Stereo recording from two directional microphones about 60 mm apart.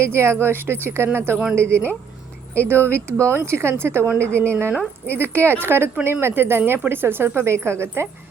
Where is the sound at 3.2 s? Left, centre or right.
Right.